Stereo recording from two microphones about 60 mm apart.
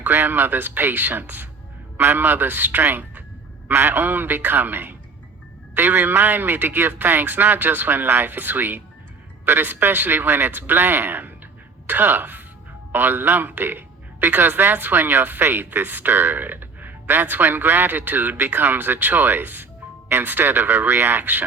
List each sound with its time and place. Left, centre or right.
0.0 s a man's voice: right